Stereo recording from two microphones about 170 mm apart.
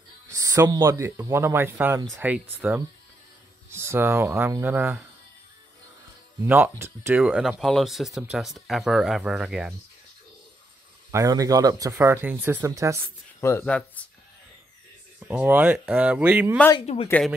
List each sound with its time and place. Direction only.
0.3 s speech: 20° right (ahead or behind)
6.4 s speech: 10° right (ahead or behind)
11.1 s speech: 20° right (ahead or behind)
13.4 s speech: 15° left (ahead or behind)
15.1 s speech: 5° right (ahead or behind)
16.8 s speech: 35° left (ahead or behind)